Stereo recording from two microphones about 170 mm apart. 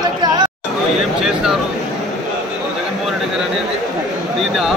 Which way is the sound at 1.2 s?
Centre (ahead or behind).